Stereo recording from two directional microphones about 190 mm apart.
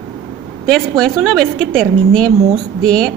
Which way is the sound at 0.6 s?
5° left (ahead or behind).